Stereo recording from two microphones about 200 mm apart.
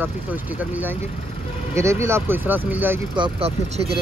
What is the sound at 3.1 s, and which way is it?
Speech, 25° right (ahead or behind).